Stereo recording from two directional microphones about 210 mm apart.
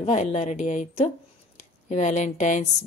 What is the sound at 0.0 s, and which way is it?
Speech, 35° left (ahead or behind).